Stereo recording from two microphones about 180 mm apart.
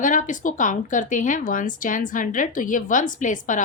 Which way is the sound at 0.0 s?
45° left (ahead or behind).